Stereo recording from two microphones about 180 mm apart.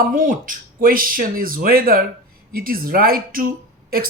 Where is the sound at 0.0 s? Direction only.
50° right (ahead or behind).